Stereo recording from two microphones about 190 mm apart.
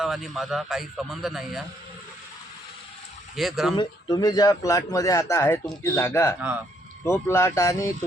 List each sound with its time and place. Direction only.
0.0 s speech: centre (ahead or behind)
3.3 s speech: centre (ahead or behind)
3.8 s a man's voice: 20° left (ahead or behind)